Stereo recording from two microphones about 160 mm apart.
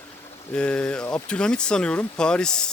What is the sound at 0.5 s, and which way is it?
Speech, 5° left (ahead or behind).